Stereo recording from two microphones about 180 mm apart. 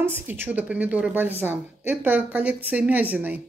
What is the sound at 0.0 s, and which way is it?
Speech, 10° right (ahead or behind).